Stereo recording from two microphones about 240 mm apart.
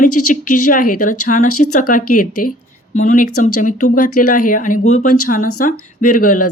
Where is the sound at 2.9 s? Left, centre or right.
Left.